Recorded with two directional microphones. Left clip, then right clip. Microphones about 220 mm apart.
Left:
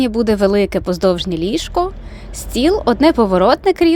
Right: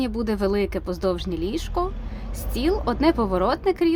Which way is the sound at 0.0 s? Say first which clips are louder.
Left 10 dB; 30° left (ahead or behind).